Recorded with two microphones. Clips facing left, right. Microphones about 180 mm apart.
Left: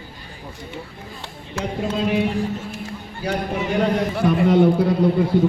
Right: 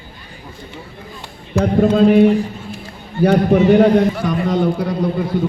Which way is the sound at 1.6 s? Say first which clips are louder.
Right 11 dB; 55° right (ahead or behind).